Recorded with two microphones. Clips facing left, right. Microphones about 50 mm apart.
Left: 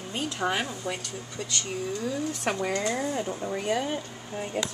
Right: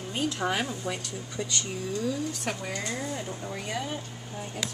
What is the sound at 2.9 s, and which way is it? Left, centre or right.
Speech, centre.